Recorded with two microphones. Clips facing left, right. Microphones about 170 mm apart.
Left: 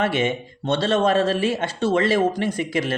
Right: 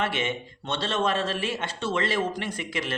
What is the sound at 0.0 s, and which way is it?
Speech, 40° left (ahead or behind).